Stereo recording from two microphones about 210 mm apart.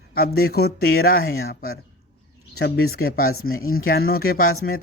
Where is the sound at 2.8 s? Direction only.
45° left (ahead or behind).